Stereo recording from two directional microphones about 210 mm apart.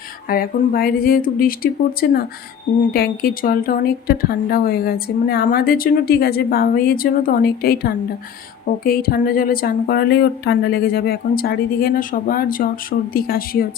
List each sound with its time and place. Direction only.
0.3 s speech: 45° left (ahead or behind)